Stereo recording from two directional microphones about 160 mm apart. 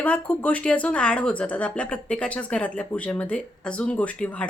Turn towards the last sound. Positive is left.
turn(degrees=5)  # may be behind; listen again after turning